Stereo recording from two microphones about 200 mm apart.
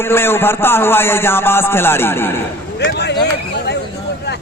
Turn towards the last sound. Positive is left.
turn(degrees=60)  # may be behind; listen again after turning